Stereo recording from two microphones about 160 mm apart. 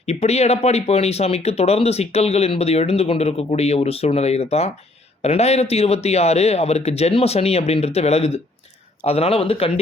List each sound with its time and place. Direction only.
0.0 s speech: 45° left (ahead or behind)